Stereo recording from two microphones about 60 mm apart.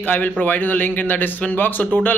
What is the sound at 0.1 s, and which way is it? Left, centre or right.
A man's voice, left.